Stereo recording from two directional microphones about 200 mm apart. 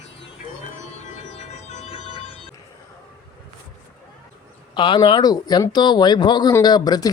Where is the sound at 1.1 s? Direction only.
35° left (ahead or behind).